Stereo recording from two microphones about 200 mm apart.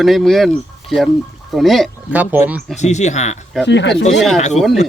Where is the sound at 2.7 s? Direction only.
35° left (ahead or behind).